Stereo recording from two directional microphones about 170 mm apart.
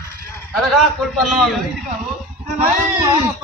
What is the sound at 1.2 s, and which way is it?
Speech, centre (ahead or behind).